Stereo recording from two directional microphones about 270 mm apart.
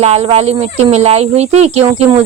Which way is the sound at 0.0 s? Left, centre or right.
Right.